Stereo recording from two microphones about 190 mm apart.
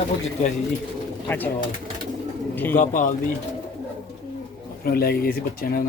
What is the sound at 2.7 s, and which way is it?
Speech, 40° left (ahead or behind).